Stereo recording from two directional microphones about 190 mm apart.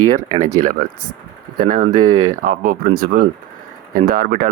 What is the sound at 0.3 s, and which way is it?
Speech, 40° right (ahead or behind).